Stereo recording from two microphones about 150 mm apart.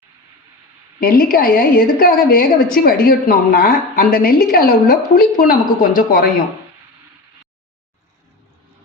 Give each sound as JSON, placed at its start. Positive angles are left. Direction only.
{"t": 0.9, "sound": "a woman's voice", "side_deg": 75}